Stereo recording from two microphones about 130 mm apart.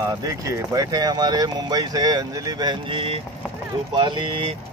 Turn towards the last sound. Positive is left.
turn(degrees=-40)  # may be behind; listen again after turning